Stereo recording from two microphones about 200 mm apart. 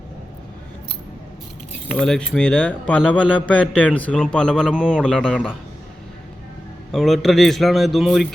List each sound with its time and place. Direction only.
1.9 s a man's voice: centre (ahead or behind)
6.9 s a man's voice: centre (ahead or behind)